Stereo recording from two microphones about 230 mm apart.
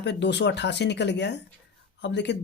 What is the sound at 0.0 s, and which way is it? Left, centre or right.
Speech, left.